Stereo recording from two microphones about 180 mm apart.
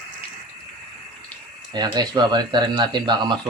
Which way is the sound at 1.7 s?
25° right (ahead or behind).